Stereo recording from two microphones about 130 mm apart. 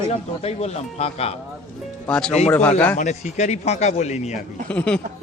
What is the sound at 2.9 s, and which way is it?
Speech, 65° left (ahead or behind).